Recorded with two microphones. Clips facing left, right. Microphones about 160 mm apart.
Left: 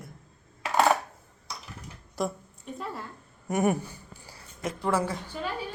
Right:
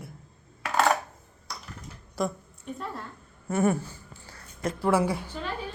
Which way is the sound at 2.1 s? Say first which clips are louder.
Right 1 dB; centre (ahead or behind).